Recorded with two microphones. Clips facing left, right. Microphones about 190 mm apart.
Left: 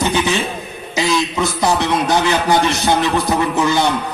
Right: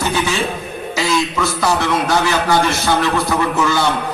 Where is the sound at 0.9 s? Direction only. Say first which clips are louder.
Left 1 dB; 20° left (ahead or behind).